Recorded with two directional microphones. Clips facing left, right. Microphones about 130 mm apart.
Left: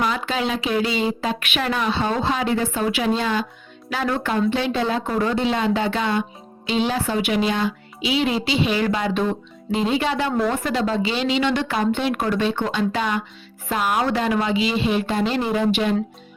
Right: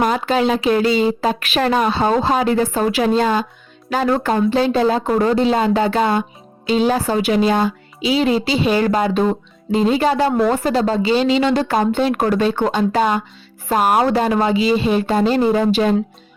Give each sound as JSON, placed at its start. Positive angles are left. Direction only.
{"t": 0.0, "sound": "a woman's voice", "side_deg": -45}